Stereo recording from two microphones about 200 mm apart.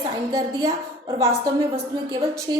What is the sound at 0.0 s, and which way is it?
A woman's voice, 20° right (ahead or behind).